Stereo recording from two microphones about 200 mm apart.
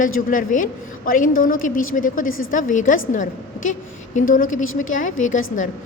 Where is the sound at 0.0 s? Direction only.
40° left (ahead or behind).